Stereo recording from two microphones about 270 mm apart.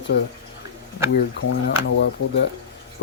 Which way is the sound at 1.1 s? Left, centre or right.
Left.